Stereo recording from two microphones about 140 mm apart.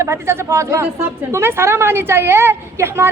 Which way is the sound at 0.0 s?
20° right (ahead or behind).